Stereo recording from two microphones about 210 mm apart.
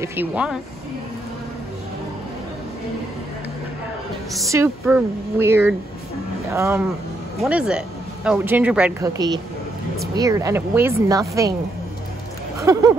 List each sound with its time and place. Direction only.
0.0 s speech: 10° right (ahead or behind)
4.5 s speech: 10° right (ahead or behind)
12.5 s a sound: 15° right (ahead or behind)